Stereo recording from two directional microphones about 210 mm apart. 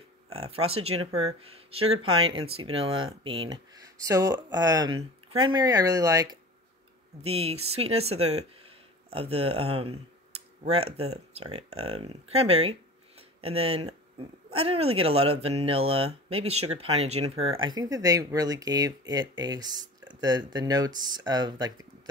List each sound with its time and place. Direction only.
0.5 s speech: 30° right (ahead or behind)
7.2 s speech: 30° right (ahead or behind)
8.5 s a sound: 25° right (ahead or behind)
10.3 s computer keyboard: 30° right (ahead or behind)
10.9 s speech: 90° right
11.3 s speech: 30° right (ahead or behind)